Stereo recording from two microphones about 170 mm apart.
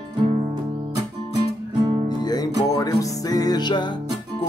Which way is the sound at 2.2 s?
20° left (ahead or behind).